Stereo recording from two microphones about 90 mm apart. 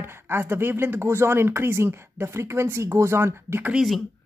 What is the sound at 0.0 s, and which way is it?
Speech, 25° right (ahead or behind).